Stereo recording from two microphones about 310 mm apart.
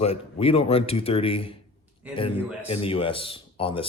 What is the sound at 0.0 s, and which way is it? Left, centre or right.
Speech, centre.